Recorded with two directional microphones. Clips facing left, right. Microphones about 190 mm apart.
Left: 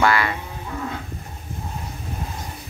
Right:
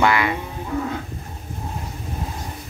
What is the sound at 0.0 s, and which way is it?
Speech, 15° right (ahead or behind).